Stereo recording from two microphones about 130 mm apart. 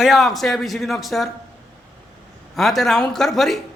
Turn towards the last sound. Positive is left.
turn(degrees=0)  # may be behind; listen again after turning